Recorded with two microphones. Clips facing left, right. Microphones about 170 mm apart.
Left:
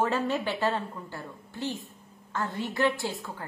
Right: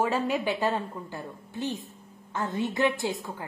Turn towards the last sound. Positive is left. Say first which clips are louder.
# right 3 dB
turn(degrees=-20)  # may be behind; listen again after turning